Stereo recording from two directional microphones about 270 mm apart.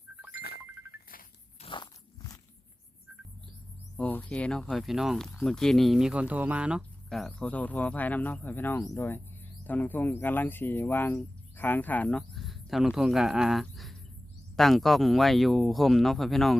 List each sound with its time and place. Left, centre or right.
1.6 s crunch: centre
3.9 s speech: centre